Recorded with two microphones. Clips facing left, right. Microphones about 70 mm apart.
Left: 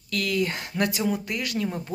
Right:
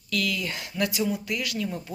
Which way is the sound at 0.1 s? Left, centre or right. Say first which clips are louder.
Left 3 dB; left.